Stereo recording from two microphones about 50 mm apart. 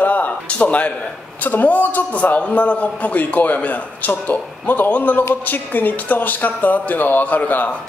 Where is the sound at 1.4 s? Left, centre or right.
Left.